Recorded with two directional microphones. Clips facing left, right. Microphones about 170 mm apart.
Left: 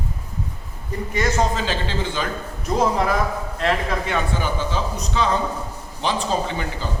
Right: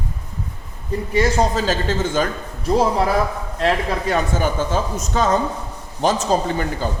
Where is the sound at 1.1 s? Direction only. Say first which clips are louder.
Right 3 dB; 35° right (ahead or behind).